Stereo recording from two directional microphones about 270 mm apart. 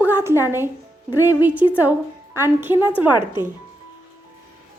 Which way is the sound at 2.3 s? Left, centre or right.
Centre.